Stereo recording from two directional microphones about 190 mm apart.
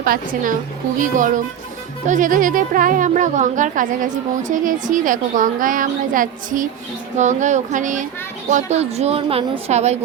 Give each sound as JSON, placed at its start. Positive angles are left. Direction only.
{"t": 0.0, "sound": "a woman's voice", "side_deg": -50}